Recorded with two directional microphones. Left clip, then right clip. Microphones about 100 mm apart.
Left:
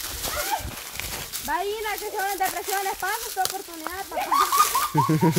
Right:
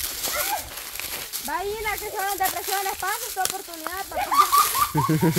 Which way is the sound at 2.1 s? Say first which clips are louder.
Left 1 dB; 25° right (ahead or behind).